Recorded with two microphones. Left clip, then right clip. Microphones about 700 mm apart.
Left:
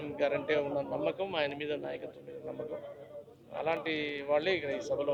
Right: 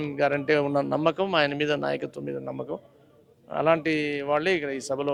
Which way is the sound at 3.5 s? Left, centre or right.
Right.